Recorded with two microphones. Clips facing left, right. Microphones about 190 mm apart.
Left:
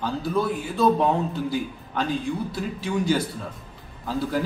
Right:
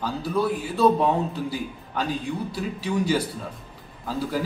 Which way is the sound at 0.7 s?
5° right (ahead or behind).